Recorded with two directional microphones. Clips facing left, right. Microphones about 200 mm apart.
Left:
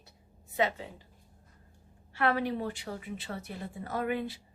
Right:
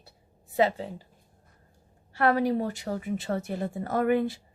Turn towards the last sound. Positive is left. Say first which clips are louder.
# right 8 dB
turn(degrees=-50)  # may be behind; listen again after turning